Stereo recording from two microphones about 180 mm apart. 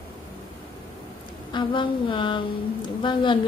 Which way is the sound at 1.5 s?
25° left (ahead or behind).